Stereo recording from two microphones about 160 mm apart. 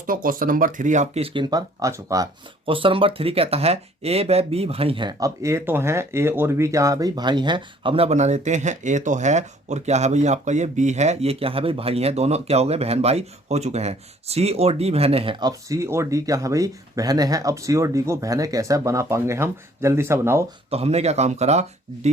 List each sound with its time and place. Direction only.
0.0 s speech: 60° right (ahead or behind); by 2.3 s 20° right (ahead or behind)
2.6 s speech: 35° right (ahead or behind); by 20.4 s 15° right (ahead or behind)
20.7 s speech: 40° right (ahead or behind)